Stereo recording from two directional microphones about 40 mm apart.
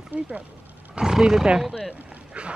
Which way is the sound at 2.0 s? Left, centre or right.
Right.